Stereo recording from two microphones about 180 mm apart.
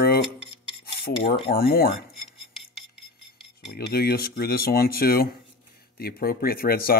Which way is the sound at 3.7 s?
60° left (ahead or behind).